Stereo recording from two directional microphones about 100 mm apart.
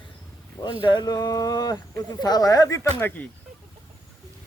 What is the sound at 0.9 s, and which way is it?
A man's voice, 45° left (ahead or behind).